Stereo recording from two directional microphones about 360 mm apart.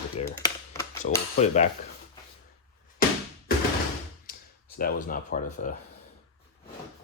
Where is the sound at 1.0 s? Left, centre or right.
Left.